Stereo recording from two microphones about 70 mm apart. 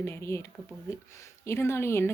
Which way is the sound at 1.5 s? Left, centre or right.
Left.